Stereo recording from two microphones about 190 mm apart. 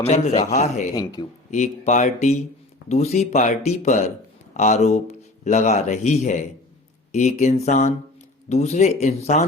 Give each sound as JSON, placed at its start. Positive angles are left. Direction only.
{"t": 0.0, "sound": "speech", "side_deg": 35}